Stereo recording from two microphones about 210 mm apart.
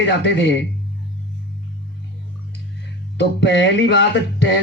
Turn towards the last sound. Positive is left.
turn(degrees=55)  # may be behind; listen again after turning